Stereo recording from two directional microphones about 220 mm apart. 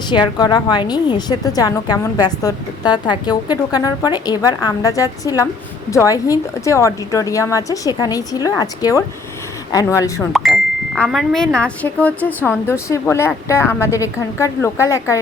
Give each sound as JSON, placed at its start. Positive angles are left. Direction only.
{"t": 0.1, "sound": "a woman's voice", "side_deg": 20}
{"t": 10.3, "sound": "a woman's voice", "side_deg": 0}